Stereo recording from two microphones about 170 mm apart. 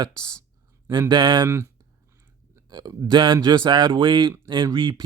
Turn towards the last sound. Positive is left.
turn(degrees=-30)  # may be behind; listen again after turning